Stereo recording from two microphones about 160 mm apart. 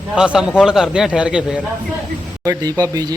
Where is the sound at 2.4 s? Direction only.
20° right (ahead or behind).